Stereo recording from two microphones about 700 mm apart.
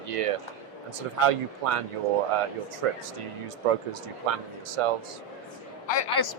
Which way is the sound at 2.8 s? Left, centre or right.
Right.